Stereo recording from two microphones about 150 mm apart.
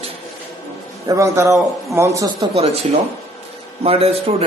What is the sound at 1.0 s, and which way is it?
A man's voice, 20° right (ahead or behind).